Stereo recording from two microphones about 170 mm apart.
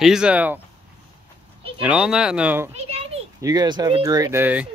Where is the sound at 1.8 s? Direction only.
5° right (ahead or behind).